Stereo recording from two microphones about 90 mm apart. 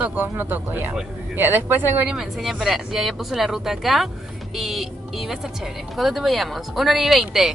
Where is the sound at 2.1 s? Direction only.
5° right (ahead or behind).